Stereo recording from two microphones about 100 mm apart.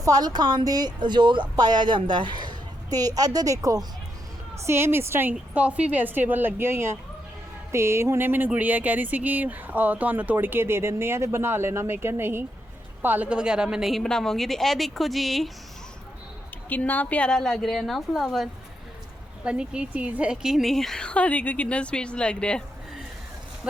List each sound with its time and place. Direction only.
0.0 s a woman's voice: 40° right (ahead or behind); by 15.4 s centre (ahead or behind)
16.6 s a woman's voice: 15° left (ahead or behind); by 18.4 s centre (ahead or behind)
19.5 s a woman's voice: 10° right (ahead or behind); by 22.6 s 10° left (ahead or behind)